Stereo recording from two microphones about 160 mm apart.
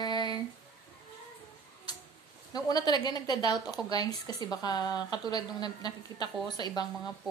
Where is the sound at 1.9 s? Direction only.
25° left (ahead or behind).